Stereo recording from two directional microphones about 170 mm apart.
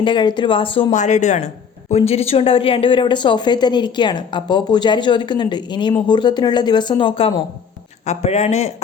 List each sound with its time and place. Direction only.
0.0 s a woman's voice: 25° left (ahead or behind)
0.9 s a woman's voice: 45° left (ahead or behind)
8.0 s speech: 40° left (ahead or behind)